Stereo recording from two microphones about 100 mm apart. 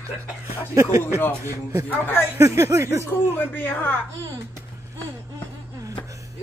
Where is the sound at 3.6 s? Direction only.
20° left (ahead or behind).